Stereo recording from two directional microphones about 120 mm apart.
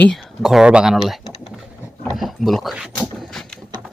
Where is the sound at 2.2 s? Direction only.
Centre (ahead or behind).